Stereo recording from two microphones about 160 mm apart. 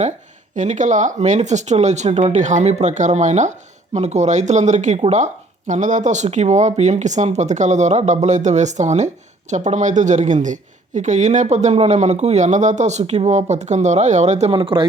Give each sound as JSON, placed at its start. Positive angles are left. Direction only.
{"t": 0.5, "sound": "speech", "side_deg": -50}